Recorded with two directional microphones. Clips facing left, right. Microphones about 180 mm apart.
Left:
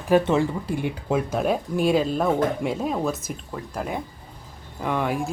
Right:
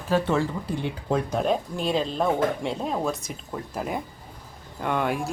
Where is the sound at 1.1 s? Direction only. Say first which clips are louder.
Left 1 dB; 5° left (ahead or behind).